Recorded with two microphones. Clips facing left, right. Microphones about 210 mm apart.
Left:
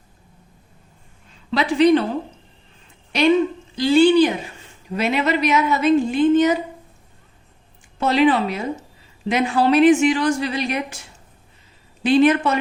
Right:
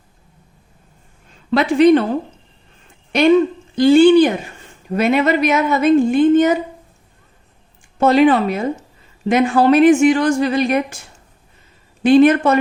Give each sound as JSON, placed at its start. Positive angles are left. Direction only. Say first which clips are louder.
{"t": 1.5, "sound": "a woman's voice", "louder": "right 4 dB", "side_deg": -50}
{"t": 3.1, "sound": "a woman's voice", "louder": "right 4 dB", "side_deg": -50}
{"t": 7.9, "sound": "a woman's voice", "louder": "right 5 dB", "side_deg": -50}
{"t": 12.0, "sound": "a woman's voice", "louder": "right 5 dB", "side_deg": -50}